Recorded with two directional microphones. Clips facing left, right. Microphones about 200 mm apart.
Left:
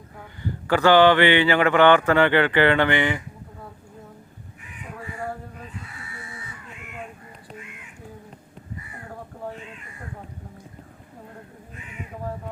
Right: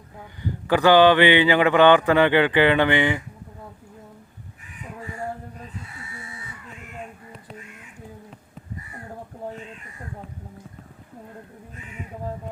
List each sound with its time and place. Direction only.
0.4 s speech: 15° right (ahead or behind)